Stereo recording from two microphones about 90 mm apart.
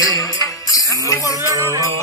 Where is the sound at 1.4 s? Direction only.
35° right (ahead or behind).